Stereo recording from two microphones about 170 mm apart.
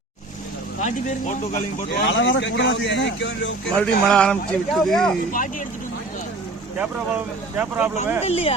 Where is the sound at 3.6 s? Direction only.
5° left (ahead or behind).